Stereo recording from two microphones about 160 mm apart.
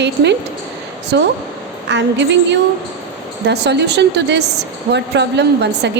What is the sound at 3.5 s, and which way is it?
A woman's voice, 90° right.